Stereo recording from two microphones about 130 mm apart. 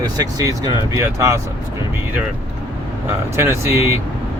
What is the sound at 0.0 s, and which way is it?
Speech, 30° right (ahead or behind).